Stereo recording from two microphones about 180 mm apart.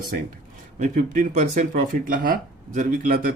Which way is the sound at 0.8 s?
45° right (ahead or behind).